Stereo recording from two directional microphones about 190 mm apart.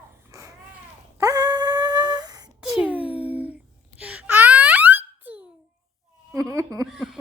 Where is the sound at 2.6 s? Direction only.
5° right (ahead or behind).